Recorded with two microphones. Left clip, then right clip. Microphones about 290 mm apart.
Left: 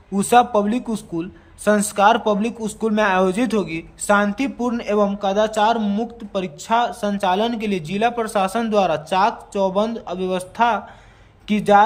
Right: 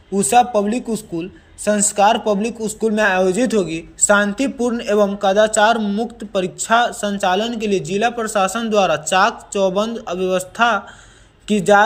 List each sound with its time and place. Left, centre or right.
0.1 s speech: centre